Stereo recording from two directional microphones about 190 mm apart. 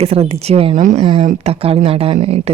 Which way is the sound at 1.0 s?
30° right (ahead or behind).